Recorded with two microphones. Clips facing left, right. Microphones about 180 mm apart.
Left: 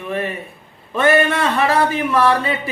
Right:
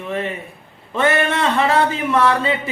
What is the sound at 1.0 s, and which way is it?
Speech, 20° right (ahead or behind).